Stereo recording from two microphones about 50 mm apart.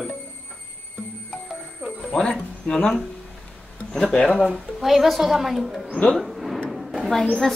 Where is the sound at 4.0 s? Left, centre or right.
Centre.